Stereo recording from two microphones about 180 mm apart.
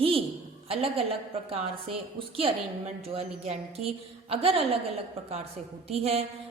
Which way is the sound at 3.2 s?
35° right (ahead or behind).